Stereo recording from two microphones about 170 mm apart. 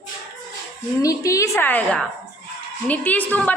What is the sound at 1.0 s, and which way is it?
A woman's voice, 20° left (ahead or behind).